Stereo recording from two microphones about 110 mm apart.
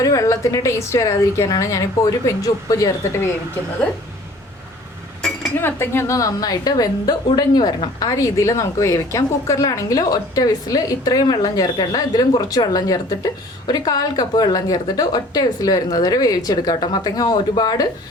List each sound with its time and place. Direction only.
0.0 s a woman's voice: 30° left (ahead or behind)
5.5 s a woman's voice: 20° left (ahead or behind); by 17.8 s 40° left (ahead or behind)